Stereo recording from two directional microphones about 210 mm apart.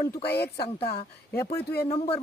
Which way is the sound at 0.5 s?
25° left (ahead or behind).